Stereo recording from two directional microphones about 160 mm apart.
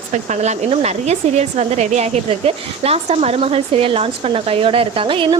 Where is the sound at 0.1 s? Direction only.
45° right (ahead or behind).